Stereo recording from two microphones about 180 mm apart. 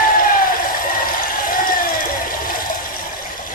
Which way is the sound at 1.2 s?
50° left (ahead or behind).